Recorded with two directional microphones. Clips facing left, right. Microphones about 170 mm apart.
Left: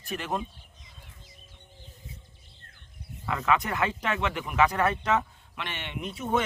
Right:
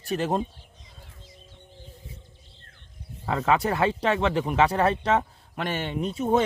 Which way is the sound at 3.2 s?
30° right (ahead or behind).